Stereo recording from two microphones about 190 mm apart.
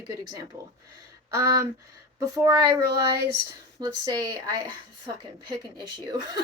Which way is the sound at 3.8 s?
20° right (ahead or behind).